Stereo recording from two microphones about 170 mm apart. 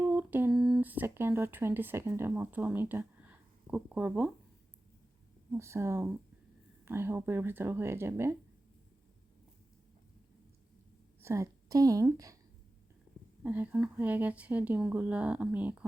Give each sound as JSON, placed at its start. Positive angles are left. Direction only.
{"t": 0.0, "sound": "humming", "side_deg": -10}
{"t": 0.5, "sound": "speech", "side_deg": 0}
{"t": 5.5, "sound": "speech", "side_deg": -15}
{"t": 11.2, "sound": "a woman's voice", "side_deg": -15}
{"t": 13.4, "sound": "speech", "side_deg": -10}